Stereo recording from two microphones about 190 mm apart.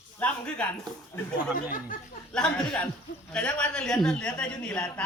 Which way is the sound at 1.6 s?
45° left (ahead or behind).